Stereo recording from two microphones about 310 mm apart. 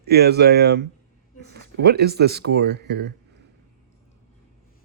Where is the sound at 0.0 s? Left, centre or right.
Right.